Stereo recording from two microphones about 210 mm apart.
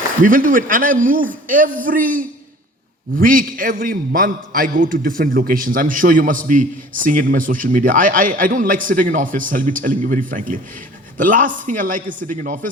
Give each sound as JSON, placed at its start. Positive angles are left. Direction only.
{"t": 0.2, "sound": "a man's voice", "side_deg": -40}